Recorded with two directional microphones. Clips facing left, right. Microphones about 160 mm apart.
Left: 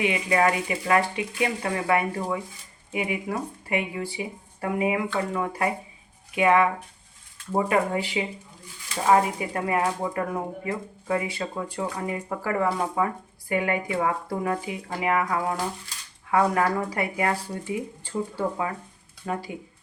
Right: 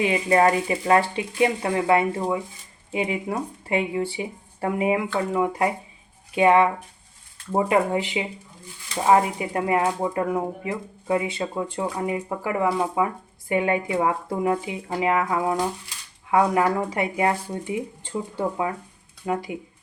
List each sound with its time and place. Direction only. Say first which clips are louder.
0.0 s speech: right 4 dB; 35° right (ahead or behind)
5.3 s speech: right 5 dB; 15° right (ahead or behind)
6.3 s speech: right 3 dB; 25° right (ahead or behind)